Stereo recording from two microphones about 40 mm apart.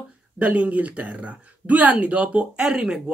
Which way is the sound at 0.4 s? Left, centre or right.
Right.